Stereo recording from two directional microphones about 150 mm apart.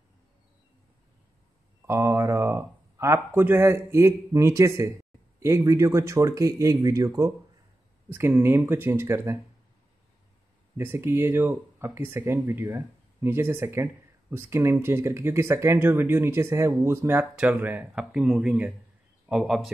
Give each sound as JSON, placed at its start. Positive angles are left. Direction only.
{"t": 1.9, "sound": "speech", "side_deg": -20}
{"t": 10.8, "sound": "a man's voice", "side_deg": -15}